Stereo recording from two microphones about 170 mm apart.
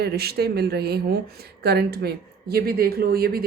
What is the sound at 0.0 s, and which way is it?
A woman's voice, 70° right (ahead or behind).